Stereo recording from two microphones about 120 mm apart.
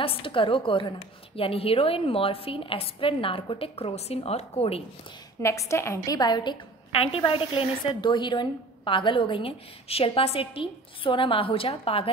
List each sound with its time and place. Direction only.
0.0 s a woman's voice: 45° left (ahead or behind)
5.4 s a woman's voice: 25° left (ahead or behind)
6.0 s a woman's voice: 35° left (ahead or behind)
6.9 s a woman's voice: 50° left (ahead or behind)